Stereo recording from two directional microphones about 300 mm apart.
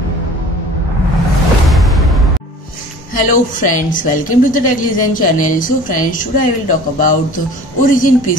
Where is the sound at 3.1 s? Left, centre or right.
Left.